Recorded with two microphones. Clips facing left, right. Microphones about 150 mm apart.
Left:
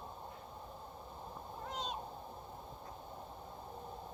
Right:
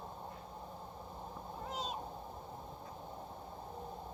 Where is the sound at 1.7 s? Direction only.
5° right (ahead or behind).